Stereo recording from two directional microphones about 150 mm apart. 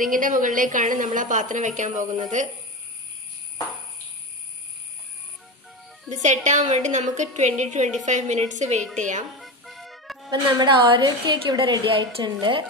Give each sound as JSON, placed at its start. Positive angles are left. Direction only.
{"t": 0.0, "sound": "a woman's voice", "side_deg": -60}
{"t": 6.2, "sound": "a woman's voice", "side_deg": -50}
{"t": 9.4, "sound": "music", "side_deg": 0}
{"t": 10.3, "sound": "a woman's voice", "side_deg": -30}